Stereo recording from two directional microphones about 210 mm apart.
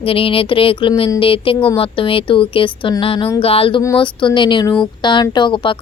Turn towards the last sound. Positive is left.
turn(degrees=25)  # may be behind; listen again after turning